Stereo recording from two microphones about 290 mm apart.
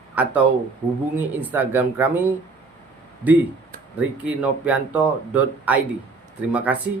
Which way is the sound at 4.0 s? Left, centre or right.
Centre.